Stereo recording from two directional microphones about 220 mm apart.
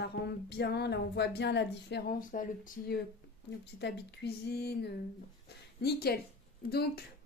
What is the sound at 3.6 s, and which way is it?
Speech, 50° left (ahead or behind).